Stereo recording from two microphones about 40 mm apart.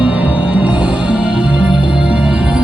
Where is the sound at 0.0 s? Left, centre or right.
Right.